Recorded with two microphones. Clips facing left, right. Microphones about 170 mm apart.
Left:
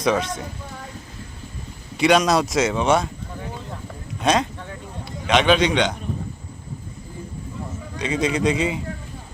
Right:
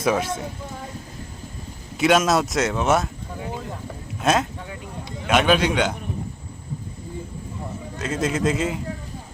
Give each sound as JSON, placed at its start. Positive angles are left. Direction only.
{"t": 0.0, "sound": "speech", "side_deg": -5}
{"t": 2.0, "sound": "speech", "side_deg": 0}
{"t": 4.2, "sound": "a sound", "side_deg": -5}
{"t": 5.2, "sound": "speech", "side_deg": -5}
{"t": 7.9, "sound": "speech", "side_deg": -5}